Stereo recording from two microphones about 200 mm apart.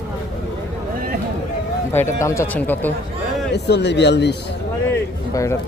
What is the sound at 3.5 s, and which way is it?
Speech, 60° left (ahead or behind).